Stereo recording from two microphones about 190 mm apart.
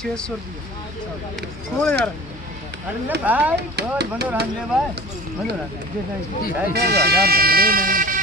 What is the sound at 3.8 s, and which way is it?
Speech, 60° right (ahead or behind).